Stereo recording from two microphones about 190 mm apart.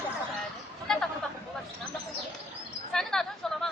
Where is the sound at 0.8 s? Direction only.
5° left (ahead or behind).